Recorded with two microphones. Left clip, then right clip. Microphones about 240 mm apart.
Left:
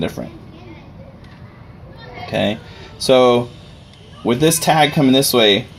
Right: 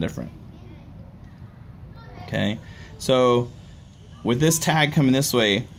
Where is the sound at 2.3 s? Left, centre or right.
Right.